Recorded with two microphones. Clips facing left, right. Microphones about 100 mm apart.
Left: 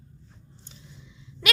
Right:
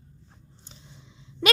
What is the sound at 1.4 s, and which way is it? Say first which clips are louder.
Speech: right 5 dB; 30° right (ahead or behind).